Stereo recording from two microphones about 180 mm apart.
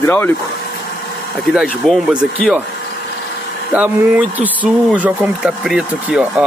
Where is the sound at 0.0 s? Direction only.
10° left (ahead or behind).